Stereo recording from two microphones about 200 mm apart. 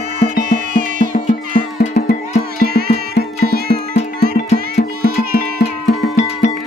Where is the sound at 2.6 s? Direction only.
50° right (ahead or behind).